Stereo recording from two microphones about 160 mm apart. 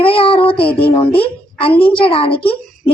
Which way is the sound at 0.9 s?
35° left (ahead or behind).